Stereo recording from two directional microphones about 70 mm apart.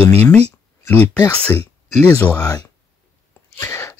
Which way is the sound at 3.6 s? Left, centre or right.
Left.